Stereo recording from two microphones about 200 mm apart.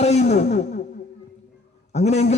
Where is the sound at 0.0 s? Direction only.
35° left (ahead or behind).